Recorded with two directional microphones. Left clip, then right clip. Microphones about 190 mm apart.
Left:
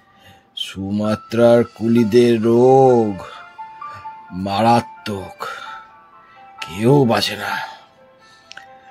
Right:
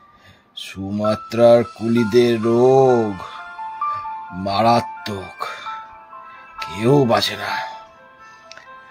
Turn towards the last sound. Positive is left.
turn(degrees=15)  # may be behind; listen again after turning